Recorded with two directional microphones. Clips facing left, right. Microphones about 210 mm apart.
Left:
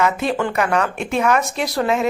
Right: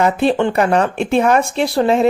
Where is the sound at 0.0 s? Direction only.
30° right (ahead or behind).